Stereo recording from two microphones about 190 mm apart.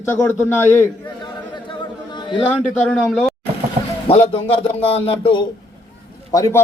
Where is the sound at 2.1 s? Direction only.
25° left (ahead or behind).